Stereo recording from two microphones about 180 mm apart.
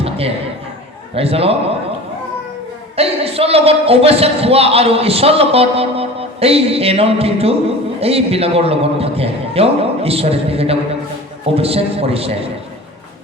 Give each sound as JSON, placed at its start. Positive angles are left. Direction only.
{"t": 0.0, "sound": "a sound", "side_deg": -35}
{"t": 1.1, "sound": "speech", "side_deg": -35}
{"t": 2.9, "sound": "speech", "side_deg": -35}